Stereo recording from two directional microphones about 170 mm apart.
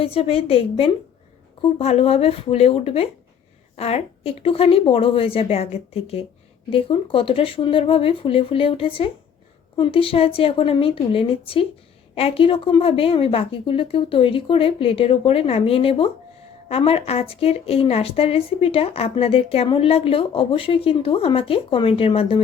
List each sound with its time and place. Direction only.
0.0 s a woman's voice: 35° left (ahead or behind)